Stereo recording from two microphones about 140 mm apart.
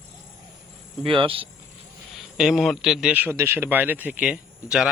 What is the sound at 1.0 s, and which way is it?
Speech, 40° right (ahead or behind).